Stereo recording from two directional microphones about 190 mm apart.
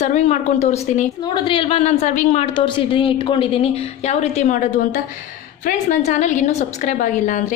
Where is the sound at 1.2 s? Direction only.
25° left (ahead or behind).